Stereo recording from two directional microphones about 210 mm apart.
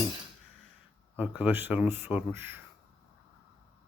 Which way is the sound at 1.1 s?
5° right (ahead or behind).